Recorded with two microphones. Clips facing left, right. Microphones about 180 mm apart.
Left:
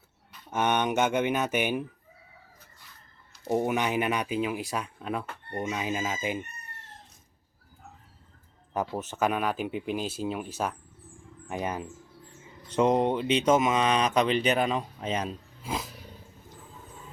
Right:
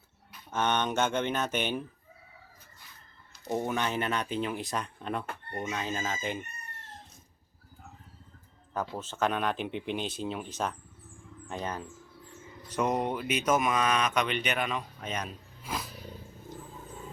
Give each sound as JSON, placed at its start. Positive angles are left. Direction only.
{"t": 0.5, "sound": "speech", "side_deg": 15}
{"t": 3.4, "sound": "speech", "side_deg": 10}
{"t": 8.7, "sound": "speech", "side_deg": 20}